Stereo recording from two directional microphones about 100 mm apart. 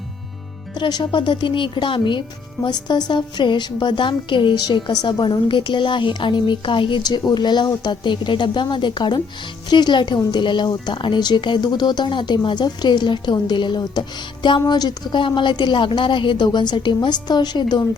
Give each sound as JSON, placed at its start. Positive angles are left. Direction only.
{"t": 0.8, "sound": "a woman's voice", "side_deg": 45}